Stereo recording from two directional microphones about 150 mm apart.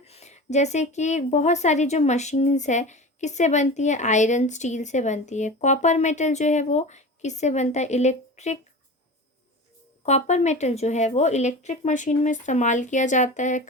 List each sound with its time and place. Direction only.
0.0 s a woman's voice: 45° left (ahead or behind)
10.1 s a woman's voice: 50° left (ahead or behind)